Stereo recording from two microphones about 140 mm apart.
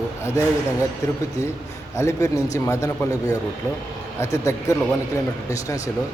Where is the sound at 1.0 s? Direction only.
20° left (ahead or behind).